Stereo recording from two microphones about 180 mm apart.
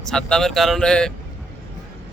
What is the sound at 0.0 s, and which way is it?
Speech, 5° left (ahead or behind).